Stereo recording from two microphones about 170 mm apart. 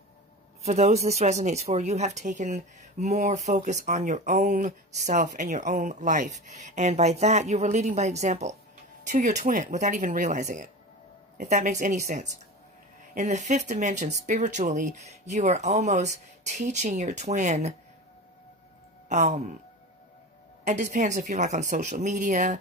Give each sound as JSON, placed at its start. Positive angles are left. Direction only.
{"t": 0.7, "sound": "speech", "side_deg": -40}
{"t": 4.4, "sound": "speech", "side_deg": -55}
{"t": 13.1, "sound": "speech", "side_deg": -45}
{"t": 19.0, "sound": "speech", "side_deg": -45}
{"t": 20.6, "sound": "speech", "side_deg": -45}